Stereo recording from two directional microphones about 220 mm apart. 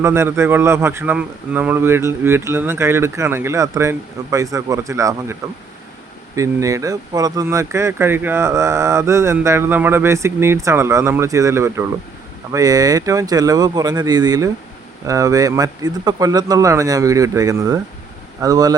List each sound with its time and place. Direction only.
0.0 s speech: 10° right (ahead or behind)